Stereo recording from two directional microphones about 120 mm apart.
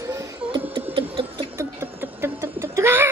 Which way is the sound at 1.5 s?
20° right (ahead or behind).